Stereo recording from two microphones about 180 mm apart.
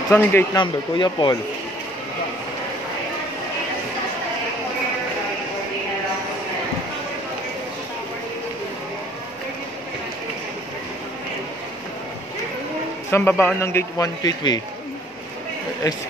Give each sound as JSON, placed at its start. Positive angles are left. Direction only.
{"t": 0.1, "sound": "a man's voice", "side_deg": 10}
{"t": 0.6, "sound": "speech", "side_deg": 25}
{"t": 13.1, "sound": "a man's voice", "side_deg": 15}